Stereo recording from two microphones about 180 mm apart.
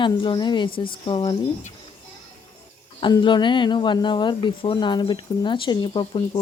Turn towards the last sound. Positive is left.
turn(degrees=25)  # may be behind; listen again after turning